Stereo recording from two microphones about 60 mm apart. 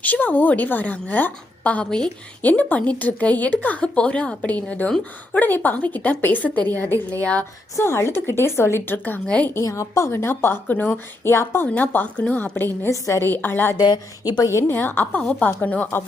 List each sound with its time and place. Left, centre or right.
0.0 s a woman's voice: left
2.4 s a woman's voice: left
5.4 s a woman's voice: left
7.2 s a woman's voice: left
7.8 s a woman's voice: left
8.9 s a woman's voice: left
9.2 s a woman's voice: centre
9.6 s a woman's voice: left
11.6 s a woman's voice: left
12.9 s a woman's voice: left
13.2 s a woman's voice: left
14.3 s a woman's voice: left
14.7 s a woman's voice: left